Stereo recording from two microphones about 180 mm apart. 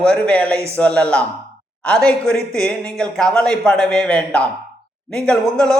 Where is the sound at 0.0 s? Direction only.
5° left (ahead or behind).